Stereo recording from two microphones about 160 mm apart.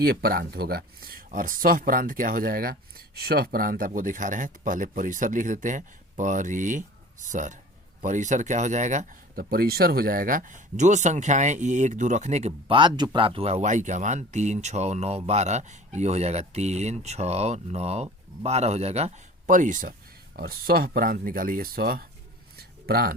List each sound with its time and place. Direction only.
0.0 s speech: 75° right (ahead or behind); by 19.9 s 55° right (ahead or behind)
20.3 s speech: 70° right (ahead or behind)
22.5 s a sound: 75° right (ahead or behind)